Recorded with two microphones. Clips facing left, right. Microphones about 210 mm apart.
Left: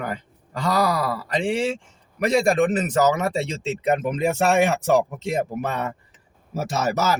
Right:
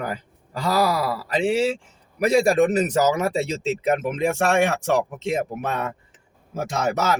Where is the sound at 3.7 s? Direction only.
Centre (ahead or behind).